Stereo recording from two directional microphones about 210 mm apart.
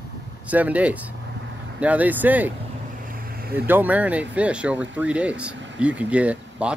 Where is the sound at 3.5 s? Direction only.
10° right (ahead or behind).